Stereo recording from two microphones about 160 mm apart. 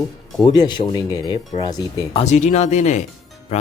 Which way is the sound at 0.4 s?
25° left (ahead or behind).